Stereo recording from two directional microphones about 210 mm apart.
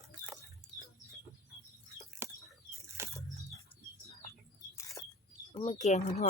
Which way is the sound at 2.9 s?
15° right (ahead or behind).